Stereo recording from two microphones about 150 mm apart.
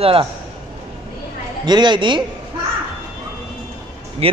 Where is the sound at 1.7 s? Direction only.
30° right (ahead or behind).